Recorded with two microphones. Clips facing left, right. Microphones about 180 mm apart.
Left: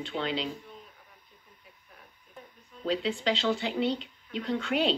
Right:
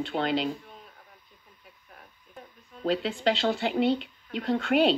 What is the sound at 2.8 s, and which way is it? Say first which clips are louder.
Speech: right 3 dB; 45° right (ahead or behind).